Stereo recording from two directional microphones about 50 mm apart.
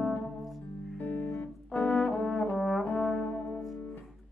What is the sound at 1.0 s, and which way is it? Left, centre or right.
Music, left.